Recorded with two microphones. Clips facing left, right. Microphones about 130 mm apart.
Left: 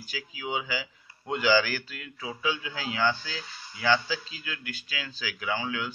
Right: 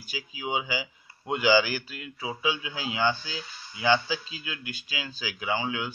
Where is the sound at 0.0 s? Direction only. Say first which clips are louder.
Right 1 dB; 20° right (ahead or behind).